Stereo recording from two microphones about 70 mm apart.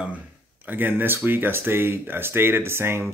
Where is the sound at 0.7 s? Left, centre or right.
Right.